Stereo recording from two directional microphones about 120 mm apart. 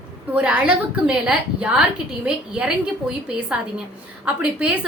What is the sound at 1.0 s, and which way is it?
A woman's voice, 10° right (ahead or behind).